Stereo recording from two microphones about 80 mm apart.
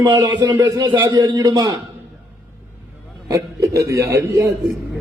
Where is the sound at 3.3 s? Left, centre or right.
Right.